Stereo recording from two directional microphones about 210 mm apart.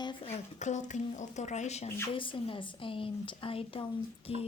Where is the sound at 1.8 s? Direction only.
10° left (ahead or behind).